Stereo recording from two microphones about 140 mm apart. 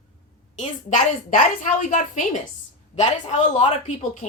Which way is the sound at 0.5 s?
65° left (ahead or behind).